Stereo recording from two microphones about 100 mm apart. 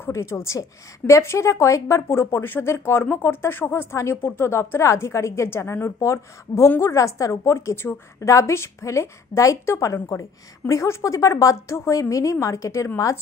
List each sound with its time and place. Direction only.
0.0 s a woman's voice: 25° left (ahead or behind)